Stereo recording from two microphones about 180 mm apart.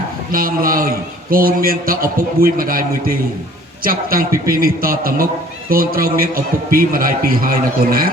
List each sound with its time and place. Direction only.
0.3 s a man's voice: 50° right (ahead or behind)